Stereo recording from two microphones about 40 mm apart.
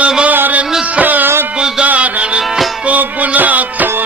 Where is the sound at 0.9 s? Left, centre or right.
Right.